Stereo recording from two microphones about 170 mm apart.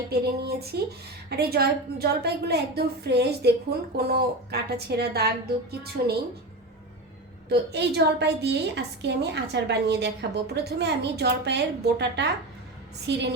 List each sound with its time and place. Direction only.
0.1 s a woman's voice: 70° right (ahead or behind)
7.5 s a woman's voice: 80° right